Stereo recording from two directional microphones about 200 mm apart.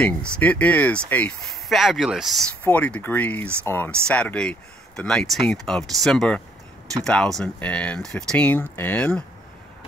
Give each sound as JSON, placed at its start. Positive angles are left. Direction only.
{"t": 0.0, "sound": "speech", "side_deg": 5}